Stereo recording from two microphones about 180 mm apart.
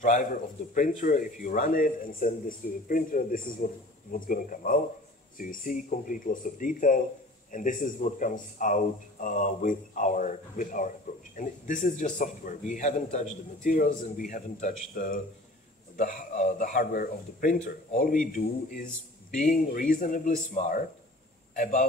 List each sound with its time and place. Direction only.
0.0 s a man's voice: 45° left (ahead or behind)